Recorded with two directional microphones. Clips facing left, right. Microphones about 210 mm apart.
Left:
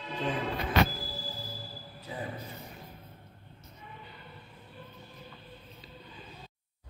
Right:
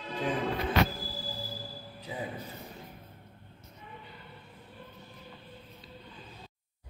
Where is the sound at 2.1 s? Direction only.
15° right (ahead or behind).